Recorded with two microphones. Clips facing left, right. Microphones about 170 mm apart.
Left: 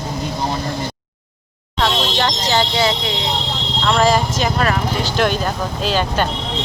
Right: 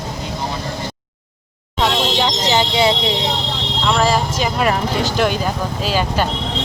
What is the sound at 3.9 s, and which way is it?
Speech, 5° right (ahead or behind).